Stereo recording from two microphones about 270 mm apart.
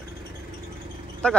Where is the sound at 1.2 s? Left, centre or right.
Centre.